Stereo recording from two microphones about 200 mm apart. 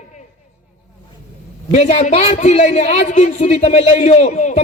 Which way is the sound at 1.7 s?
35° left (ahead or behind).